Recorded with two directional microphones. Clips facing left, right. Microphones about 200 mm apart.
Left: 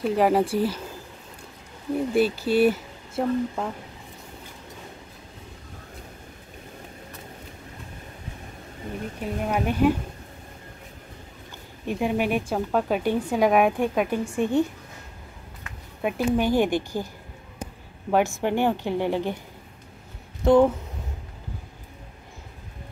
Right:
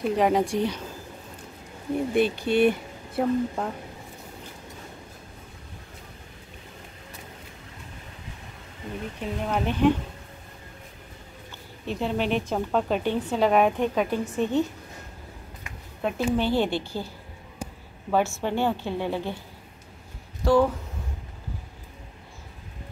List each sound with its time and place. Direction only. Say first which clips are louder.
0.0 s speech: left 2 dB; 5° left (ahead or behind)
2.1 s speech: left 1 dB; 5° left (ahead or behind)
9.2 s a woman's voice: left 1 dB; 10° left (ahead or behind)
11.8 s a woman's voice: left 2 dB; 10° left (ahead or behind)
16.0 s a woman's voice: left 2 dB; 10° left (ahead or behind)
18.1 s a woman's voice: left 2 dB; 15° left (ahead or behind)
20.4 s speech: left 3 dB; 20° left (ahead or behind)